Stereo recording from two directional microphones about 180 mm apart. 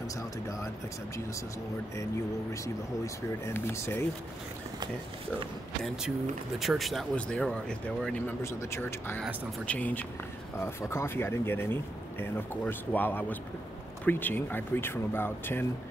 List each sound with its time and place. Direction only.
0.1 s speech: 15° left (ahead or behind)
3.4 s speech: 15° left (ahead or behind)
5.8 s speech: centre (ahead or behind)